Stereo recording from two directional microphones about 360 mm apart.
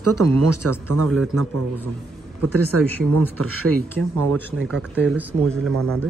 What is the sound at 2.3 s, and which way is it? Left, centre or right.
A man's voice, right.